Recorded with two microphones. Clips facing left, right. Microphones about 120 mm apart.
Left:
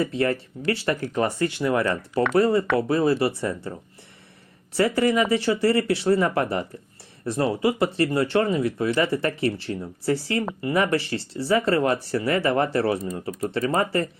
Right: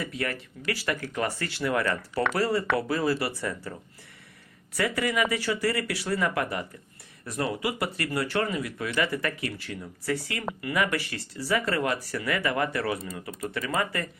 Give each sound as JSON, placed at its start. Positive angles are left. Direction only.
{"t": 0.0, "sound": "speech", "side_deg": 30}